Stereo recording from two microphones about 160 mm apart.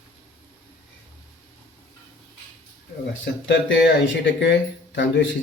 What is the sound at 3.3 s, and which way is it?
Speech, 90° left.